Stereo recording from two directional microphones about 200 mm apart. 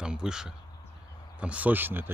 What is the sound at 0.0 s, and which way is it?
Speech, 5° right (ahead or behind).